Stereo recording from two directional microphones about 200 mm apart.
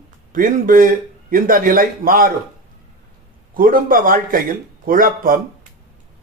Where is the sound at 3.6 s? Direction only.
45° right (ahead or behind).